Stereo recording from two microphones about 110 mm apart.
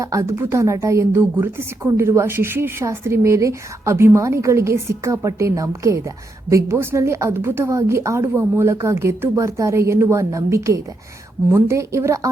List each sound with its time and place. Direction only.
0.0 s a woman's voice: 25° right (ahead or behind)